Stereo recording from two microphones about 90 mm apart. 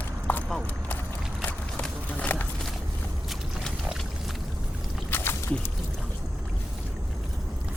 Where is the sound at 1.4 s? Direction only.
20° left (ahead or behind).